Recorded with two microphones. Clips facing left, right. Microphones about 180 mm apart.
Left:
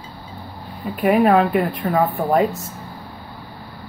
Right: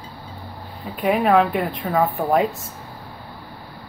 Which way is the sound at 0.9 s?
5° left (ahead or behind).